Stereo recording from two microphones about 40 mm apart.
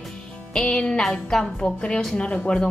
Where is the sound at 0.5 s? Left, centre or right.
Left.